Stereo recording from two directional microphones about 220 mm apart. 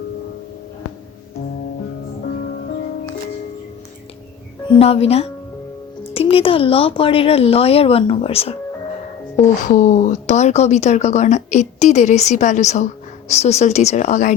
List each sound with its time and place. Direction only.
4.7 s a woman's voice: 25° left (ahead or behind)